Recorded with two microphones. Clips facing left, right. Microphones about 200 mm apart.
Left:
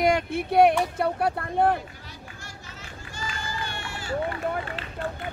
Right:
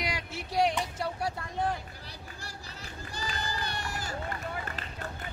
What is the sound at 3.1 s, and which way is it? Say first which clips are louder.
Run: left 2 dB; 35° right (ahead or behind).